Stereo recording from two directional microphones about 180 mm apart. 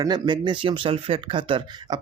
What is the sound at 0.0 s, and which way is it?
Speech, 25° right (ahead or behind).